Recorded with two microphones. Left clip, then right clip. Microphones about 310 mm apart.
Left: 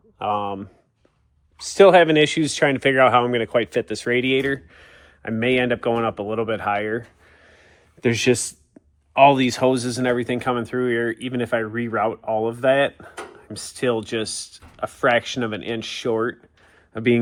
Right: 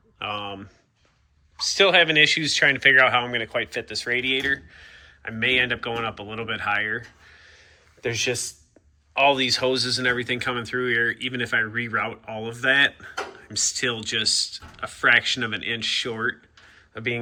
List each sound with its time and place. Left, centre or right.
0.2 s speech: centre
14.3 s speech: left
14.5 s speech: centre